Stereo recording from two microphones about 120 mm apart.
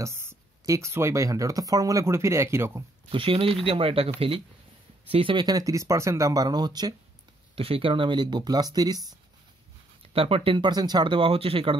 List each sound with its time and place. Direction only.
0.0 s speech: 20° right (ahead or behind)
3.1 s speech: 45° right (ahead or behind)
5.1 s speech: 45° right (ahead or behind)
7.5 s speech: 50° right (ahead or behind); by 9.0 s 35° right (ahead or behind)
10.1 s speech: 50° right (ahead or behind)